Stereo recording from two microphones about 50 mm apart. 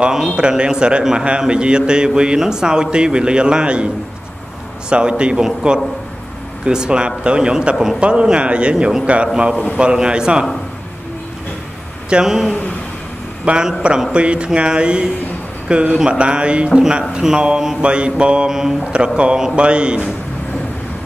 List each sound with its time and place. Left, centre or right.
0.0 s a man's voice: centre
0.4 s mantra: centre
1.4 s a man's voice: centre
4.8 s mantra: centre
9.8 s a man's voice: centre
12.1 s a man's voice: centre
14.1 s mantra: right
18.5 s a man's voice: centre
19.5 s mantra: right